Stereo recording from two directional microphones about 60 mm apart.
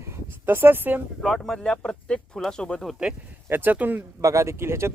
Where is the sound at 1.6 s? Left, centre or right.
Centre.